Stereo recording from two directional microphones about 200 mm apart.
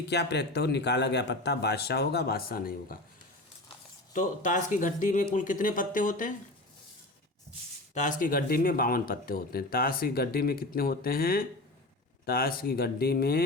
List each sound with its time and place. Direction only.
0.1 s a man's voice: 55° left (ahead or behind)
4.1 s speech: 40° left (ahead or behind)
7.9 s speech: 40° left (ahead or behind)